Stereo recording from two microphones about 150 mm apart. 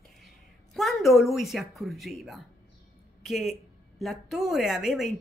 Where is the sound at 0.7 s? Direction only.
Centre (ahead or behind).